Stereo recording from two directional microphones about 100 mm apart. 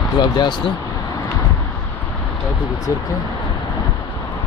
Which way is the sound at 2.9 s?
30° left (ahead or behind).